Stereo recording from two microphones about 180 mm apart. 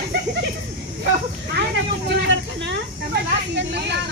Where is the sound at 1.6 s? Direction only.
70° right (ahead or behind).